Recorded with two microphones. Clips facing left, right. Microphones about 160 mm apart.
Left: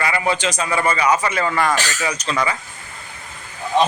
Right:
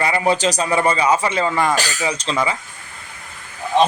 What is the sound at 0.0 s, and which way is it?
A man's voice, 30° right (ahead or behind).